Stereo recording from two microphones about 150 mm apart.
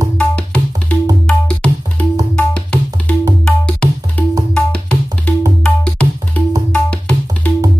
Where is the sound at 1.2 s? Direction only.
5° left (ahead or behind).